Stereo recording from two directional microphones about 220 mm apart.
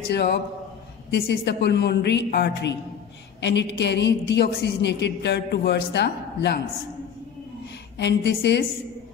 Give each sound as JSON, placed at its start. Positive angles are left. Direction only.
{"t": 0.0, "sound": "a woman's voice", "side_deg": 45}
{"t": 8.0, "sound": "a woman's voice", "side_deg": 50}